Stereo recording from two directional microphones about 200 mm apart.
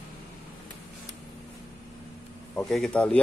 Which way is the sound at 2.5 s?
5° left (ahead or behind).